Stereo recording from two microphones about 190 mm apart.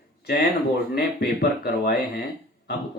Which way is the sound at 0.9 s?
60° left (ahead or behind).